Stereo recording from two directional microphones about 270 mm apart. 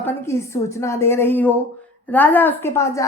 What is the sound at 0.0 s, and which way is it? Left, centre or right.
Speech, centre.